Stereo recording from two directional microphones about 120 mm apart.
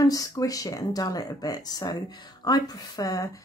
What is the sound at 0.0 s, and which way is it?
Speech, 30° left (ahead or behind).